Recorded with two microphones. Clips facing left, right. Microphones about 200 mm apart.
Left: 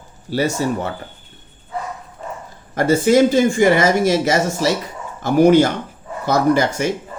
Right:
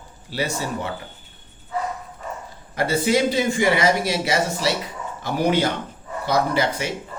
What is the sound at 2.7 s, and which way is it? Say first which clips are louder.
Speech: left 7 dB; 45° left (ahead or behind).